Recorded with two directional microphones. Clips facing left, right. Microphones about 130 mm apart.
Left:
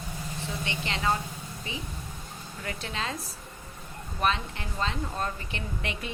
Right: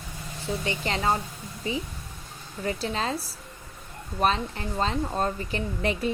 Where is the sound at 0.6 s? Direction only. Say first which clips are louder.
Right 3 dB; 40° right (ahead or behind).